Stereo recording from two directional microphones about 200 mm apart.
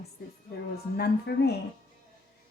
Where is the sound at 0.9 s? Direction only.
55° left (ahead or behind).